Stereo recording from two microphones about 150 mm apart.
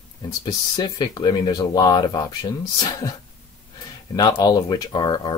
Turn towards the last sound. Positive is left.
turn(degrees=30)  # may be behind; listen again after turning